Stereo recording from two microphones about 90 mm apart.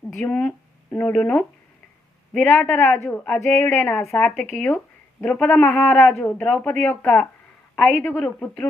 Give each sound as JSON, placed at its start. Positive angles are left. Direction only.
{"t": 0.1, "sound": "a woman's voice", "side_deg": 10}
{"t": 3.4, "sound": "a woman's voice", "side_deg": 25}
{"t": 4.2, "sound": "a woman's voice", "side_deg": 15}
{"t": 8.2, "sound": "speech", "side_deg": 15}